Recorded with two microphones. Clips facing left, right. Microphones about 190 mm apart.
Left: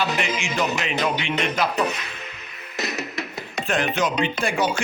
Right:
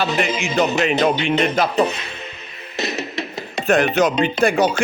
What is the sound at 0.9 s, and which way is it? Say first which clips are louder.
Speech: right 7 dB; 30° right (ahead or behind).